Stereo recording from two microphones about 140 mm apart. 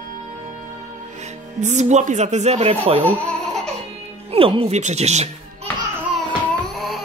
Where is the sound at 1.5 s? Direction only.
55° right (ahead or behind).